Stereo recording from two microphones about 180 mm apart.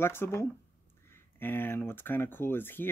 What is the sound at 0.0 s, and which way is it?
Speech, 15° left (ahead or behind).